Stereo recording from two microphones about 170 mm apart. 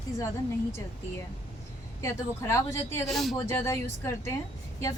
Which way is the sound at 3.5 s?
15° left (ahead or behind).